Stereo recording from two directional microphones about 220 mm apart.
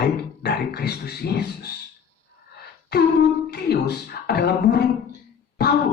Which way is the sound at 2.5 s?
45° left (ahead or behind).